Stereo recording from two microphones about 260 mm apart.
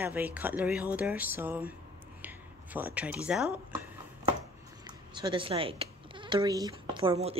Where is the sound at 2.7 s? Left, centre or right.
Centre.